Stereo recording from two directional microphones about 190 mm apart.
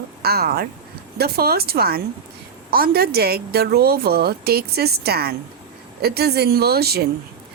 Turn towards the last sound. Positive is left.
turn(degrees=-55)  # may be behind; listen again after turning